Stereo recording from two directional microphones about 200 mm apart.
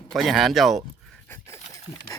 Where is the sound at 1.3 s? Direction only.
15° left (ahead or behind).